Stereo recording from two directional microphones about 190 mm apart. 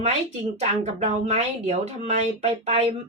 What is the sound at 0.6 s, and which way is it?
Speech, 35° right (ahead or behind).